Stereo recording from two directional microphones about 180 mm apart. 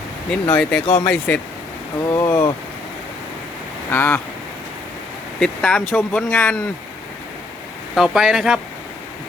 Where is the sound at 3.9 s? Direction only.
15° left (ahead or behind).